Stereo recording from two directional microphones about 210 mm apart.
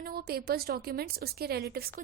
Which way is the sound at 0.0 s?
45° right (ahead or behind).